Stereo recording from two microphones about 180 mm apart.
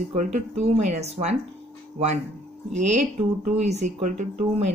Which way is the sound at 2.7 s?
40° right (ahead or behind).